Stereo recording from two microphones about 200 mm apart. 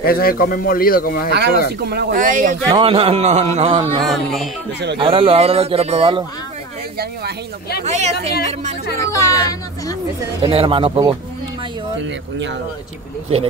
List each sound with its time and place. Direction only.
0.0 s speech: 45° left (ahead or behind)
1.3 s speech: 55° right (ahead or behind)
2.7 s speech: 25° right (ahead or behind)
4.1 s speech: centre (ahead or behind)
4.9 s speech: 25° right (ahead or behind)
7.8 s speech: 35° right (ahead or behind)
9.0 s speech: 15° left (ahead or behind)
10.4 s speech: 25° right (ahead or behind)
12.0 s speech: 65° right (ahead or behind)